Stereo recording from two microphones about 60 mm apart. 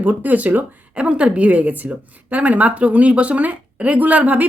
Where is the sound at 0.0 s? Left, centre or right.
Right.